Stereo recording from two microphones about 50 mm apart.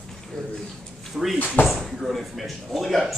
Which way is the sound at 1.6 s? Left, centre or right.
Left.